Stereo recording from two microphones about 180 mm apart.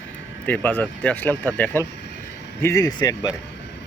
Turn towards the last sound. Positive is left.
turn(degrees=20)  # may be behind; listen again after turning